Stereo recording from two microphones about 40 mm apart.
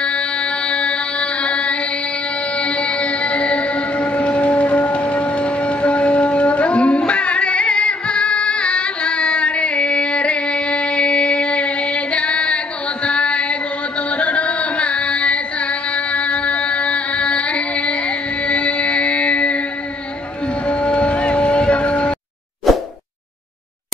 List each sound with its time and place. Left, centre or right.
0.0 s music: left
13.0 s chant: left
20.6 s a sound: left